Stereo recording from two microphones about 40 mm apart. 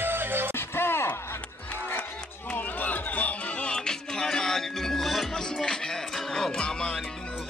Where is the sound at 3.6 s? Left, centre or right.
Centre.